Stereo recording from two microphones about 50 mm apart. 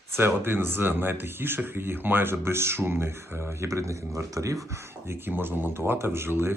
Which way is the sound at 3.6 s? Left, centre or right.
Right.